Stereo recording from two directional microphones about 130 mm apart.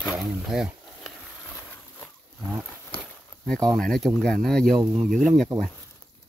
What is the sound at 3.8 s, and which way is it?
Speech, 5° left (ahead or behind).